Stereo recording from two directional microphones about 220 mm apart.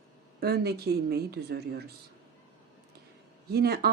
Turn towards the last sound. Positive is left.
turn(degrees=-45)  # may be behind; listen again after turning